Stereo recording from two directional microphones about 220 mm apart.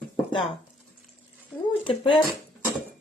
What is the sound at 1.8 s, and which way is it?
Speech, 25° left (ahead or behind).